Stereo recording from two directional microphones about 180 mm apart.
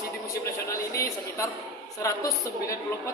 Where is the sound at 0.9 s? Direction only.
15° left (ahead or behind).